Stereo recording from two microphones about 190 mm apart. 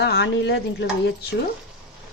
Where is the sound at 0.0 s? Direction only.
65° left (ahead or behind).